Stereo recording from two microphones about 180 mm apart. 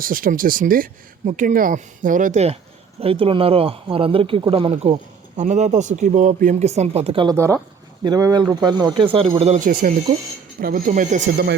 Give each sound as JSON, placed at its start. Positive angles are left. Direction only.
{"t": 0.0, "sound": "speech", "side_deg": -50}
{"t": 7.3, "sound": "speech", "side_deg": -15}